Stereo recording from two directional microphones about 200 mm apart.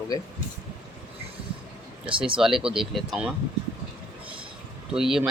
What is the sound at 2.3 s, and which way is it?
Speech, centre (ahead or behind).